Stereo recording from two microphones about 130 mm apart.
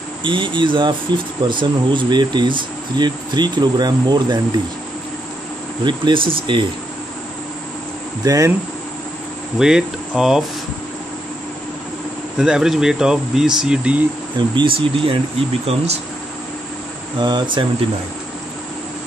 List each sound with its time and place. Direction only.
0.2 s speech: 40° right (ahead or behind)
5.9 s speech: 40° right (ahead or behind)
8.2 s speech: 25° right (ahead or behind)
9.6 s speech: 5° right (ahead or behind)
12.4 s speech: 5° right (ahead or behind)
14.5 s speech: 40° right (ahead or behind)
15.6 s speech: 55° right (ahead or behind)
17.2 s speech: 35° right (ahead or behind)